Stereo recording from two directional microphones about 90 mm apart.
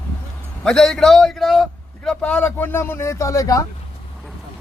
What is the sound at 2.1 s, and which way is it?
Speech, 10° left (ahead or behind).